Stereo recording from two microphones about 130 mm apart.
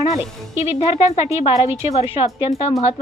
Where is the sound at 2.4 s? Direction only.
55° left (ahead or behind).